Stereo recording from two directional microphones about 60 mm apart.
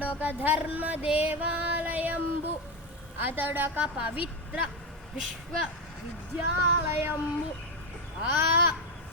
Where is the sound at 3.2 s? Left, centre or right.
Right.